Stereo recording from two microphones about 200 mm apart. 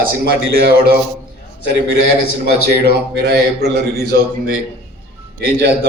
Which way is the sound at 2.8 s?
55° right (ahead or behind).